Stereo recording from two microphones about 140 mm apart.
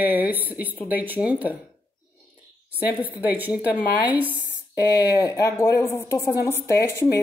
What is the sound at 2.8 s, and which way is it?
Speech, 10° right (ahead or behind).